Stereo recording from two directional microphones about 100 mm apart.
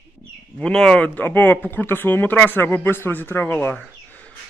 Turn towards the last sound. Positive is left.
turn(degrees=15)  # may be behind; listen again after turning